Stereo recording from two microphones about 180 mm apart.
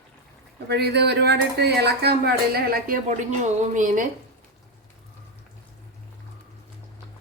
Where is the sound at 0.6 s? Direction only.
65° right (ahead or behind); by 4.0 s 45° right (ahead or behind).